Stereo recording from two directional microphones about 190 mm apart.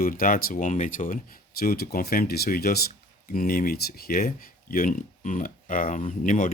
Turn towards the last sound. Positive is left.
turn(degrees=40)  # may be behind; listen again after turning